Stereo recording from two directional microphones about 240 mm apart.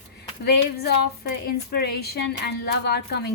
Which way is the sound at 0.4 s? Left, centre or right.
Left.